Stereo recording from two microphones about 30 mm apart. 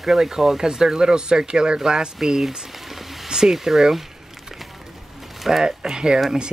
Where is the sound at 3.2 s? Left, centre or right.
Right.